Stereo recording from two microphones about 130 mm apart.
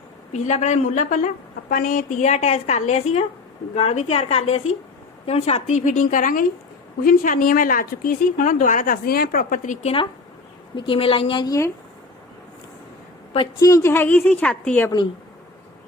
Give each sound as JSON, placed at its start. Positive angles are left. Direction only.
{"t": 0.3, "sound": "a woman's voice", "side_deg": 65}
{"t": 1.7, "sound": "a woman's voice", "side_deg": 90}
{"t": 10.8, "sound": "a woman's voice", "side_deg": 45}
{"t": 11.4, "sound": "speech", "side_deg": 25}
{"t": 13.6, "sound": "a woman's voice", "side_deg": 25}